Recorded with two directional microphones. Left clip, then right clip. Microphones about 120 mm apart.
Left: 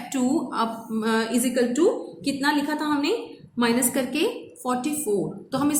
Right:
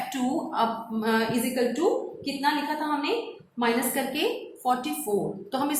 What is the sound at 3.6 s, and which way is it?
A woman's voice, 40° left (ahead or behind).